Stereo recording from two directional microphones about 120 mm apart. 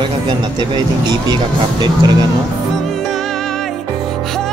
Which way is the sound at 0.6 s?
35° right (ahead or behind).